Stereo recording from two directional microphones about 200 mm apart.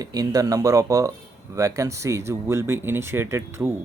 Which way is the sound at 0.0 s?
20° right (ahead or behind).